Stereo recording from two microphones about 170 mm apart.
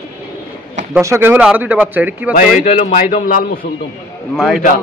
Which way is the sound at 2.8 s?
50° left (ahead or behind).